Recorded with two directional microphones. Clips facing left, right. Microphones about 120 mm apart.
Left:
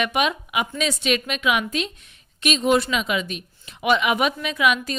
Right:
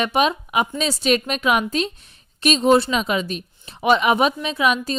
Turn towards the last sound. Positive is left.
turn(degrees=-30)  # may be behind; listen again after turning